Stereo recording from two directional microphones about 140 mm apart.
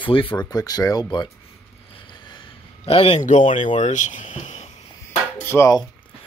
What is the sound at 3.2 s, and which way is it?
Speech, 65° left (ahead or behind).